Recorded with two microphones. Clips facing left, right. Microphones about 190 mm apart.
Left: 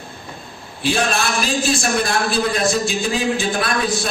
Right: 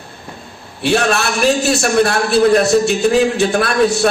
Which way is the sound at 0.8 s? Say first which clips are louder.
Right 5 dB; 65° right (ahead or behind).